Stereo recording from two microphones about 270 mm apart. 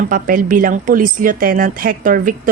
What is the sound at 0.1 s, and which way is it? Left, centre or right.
A woman's voice, right.